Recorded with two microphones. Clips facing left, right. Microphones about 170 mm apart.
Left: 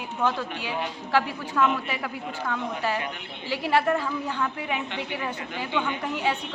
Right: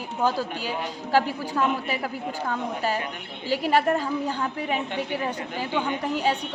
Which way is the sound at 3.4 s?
40° right (ahead or behind).